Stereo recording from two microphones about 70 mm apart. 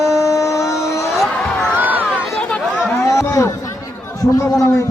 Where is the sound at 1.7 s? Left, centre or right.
Right.